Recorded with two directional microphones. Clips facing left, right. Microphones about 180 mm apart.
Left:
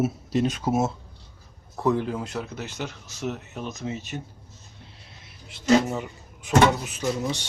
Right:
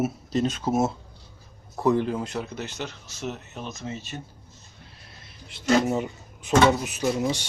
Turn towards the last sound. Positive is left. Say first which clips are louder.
# right 2 dB
turn(degrees=-10)  # may be behind; listen again after turning